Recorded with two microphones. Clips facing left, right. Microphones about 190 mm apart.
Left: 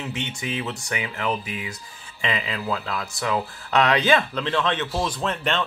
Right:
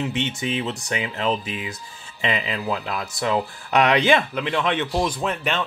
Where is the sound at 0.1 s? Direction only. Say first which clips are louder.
Right 4 dB; 25° right (ahead or behind).